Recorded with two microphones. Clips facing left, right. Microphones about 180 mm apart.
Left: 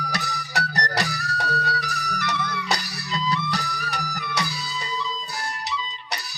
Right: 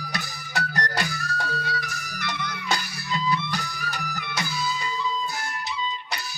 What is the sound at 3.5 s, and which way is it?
Music, 70° left (ahead or behind).